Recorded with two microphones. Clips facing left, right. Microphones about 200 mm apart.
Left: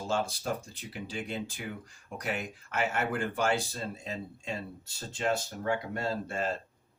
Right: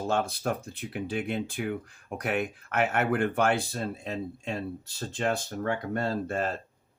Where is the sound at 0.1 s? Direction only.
60° right (ahead or behind).